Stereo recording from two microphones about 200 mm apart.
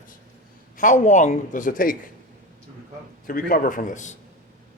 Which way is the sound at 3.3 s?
45° left (ahead or behind).